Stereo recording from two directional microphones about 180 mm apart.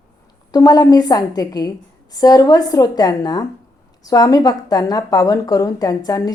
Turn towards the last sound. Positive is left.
turn(degrees=20)  # may be behind; listen again after turning